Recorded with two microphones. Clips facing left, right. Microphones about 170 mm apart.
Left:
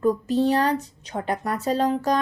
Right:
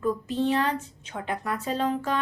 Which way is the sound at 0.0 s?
40° left (ahead or behind).